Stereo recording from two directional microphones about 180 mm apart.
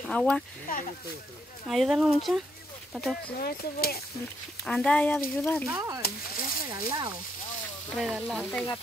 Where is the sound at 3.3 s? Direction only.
60° left (ahead or behind).